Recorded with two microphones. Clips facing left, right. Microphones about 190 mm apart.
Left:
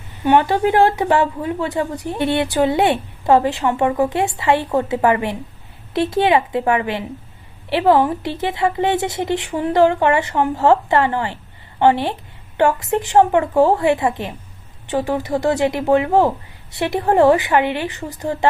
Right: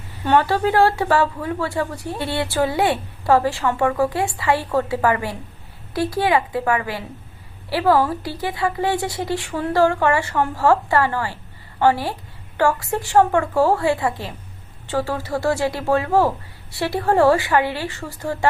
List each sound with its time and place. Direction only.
0.3 s speech: 20° left (ahead or behind)